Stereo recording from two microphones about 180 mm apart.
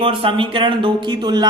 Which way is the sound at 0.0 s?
30° right (ahead or behind).